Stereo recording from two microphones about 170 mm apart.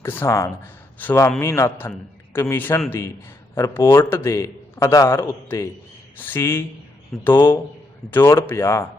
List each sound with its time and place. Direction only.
0.0 s a man's voice: 15° left (ahead or behind)